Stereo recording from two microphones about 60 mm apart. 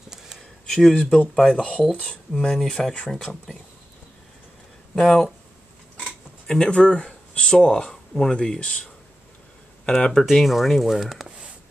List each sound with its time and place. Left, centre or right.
0.7 s speech: centre
4.9 s speech: centre
6.4 s speech: centre
8.4 s speech: centre
9.8 s speech: centre
10.3 s speech: centre